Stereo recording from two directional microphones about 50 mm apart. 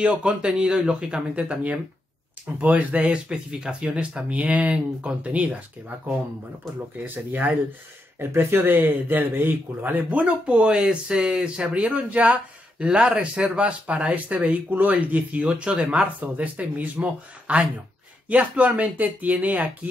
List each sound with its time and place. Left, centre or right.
0.0 s speech: right
3.1 s speech: centre
8.2 s speech: right
15.6 s speech: right